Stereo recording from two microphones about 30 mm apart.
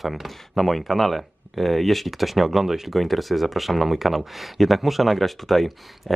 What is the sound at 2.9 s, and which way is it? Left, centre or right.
Speech, centre.